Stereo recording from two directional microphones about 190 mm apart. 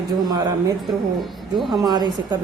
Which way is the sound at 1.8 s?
20° right (ahead or behind).